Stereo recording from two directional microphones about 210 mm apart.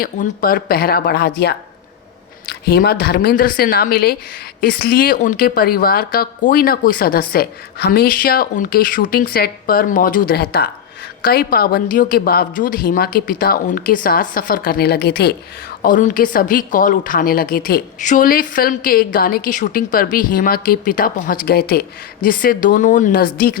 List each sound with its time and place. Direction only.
0.0 s speech: 45° left (ahead or behind)
15.8 s a woman's voice: 40° left (ahead or behind)